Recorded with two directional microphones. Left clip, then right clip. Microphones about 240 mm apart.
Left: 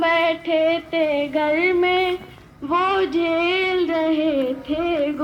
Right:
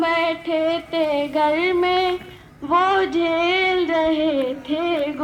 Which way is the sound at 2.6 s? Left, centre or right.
Left.